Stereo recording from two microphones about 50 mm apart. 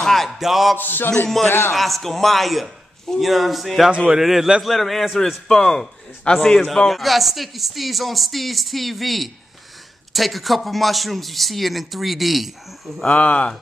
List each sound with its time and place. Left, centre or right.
0.0 s a sound: centre
0.4 s a man's voice: centre
0.7 s music: left
1.7 s a man's voice: centre
5.5 s a man's voice: centre
6.9 s a man's voice: centre
13.1 s speech: left